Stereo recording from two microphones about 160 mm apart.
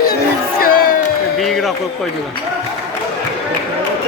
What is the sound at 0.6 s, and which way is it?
Crowd, 65° left (ahead or behind).